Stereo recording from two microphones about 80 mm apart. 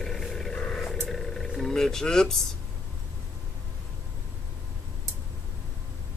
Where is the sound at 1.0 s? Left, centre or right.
Centre.